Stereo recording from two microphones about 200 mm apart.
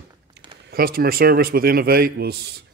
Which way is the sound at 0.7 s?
50° right (ahead or behind).